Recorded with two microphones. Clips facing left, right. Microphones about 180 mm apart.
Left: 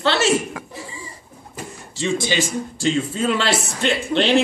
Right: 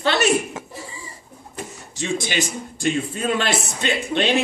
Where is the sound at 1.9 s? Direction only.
15° right (ahead or behind).